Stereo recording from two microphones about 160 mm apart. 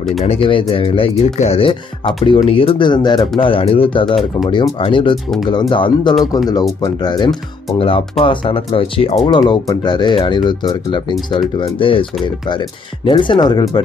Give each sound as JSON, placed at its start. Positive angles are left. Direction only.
{"t": 0.2, "sound": "speech", "side_deg": 40}
{"t": 4.0, "sound": "speech", "side_deg": 0}
{"t": 4.5, "sound": "speech", "side_deg": 30}
{"t": 9.5, "sound": "speech", "side_deg": 30}